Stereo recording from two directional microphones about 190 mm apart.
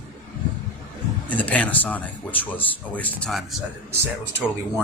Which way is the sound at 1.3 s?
10° left (ahead or behind).